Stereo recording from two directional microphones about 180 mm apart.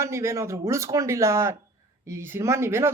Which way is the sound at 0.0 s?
15° right (ahead or behind).